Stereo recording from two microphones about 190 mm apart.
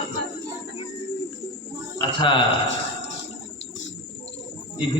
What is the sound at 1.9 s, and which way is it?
Speech, 25° left (ahead or behind).